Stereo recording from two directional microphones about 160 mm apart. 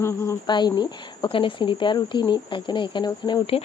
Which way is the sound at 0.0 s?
15° left (ahead or behind).